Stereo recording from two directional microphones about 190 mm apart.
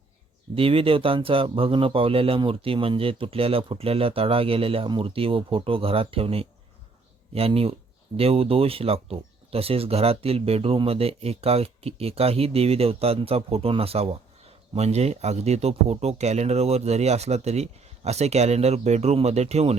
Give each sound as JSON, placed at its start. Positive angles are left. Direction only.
{"t": 0.5, "sound": "speech", "side_deg": -30}